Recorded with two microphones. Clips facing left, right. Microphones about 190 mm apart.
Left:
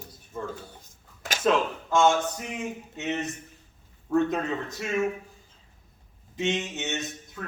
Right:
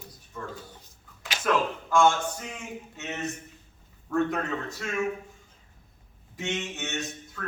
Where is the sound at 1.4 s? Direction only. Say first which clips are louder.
Left 3 dB; 25° left (ahead or behind).